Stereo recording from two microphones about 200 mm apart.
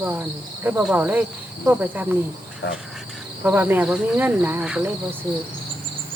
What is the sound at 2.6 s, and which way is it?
Speech, 65° left (ahead or behind).